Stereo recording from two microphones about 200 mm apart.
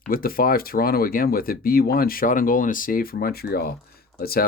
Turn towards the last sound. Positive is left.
turn(degrees=50)  # may be behind; listen again after turning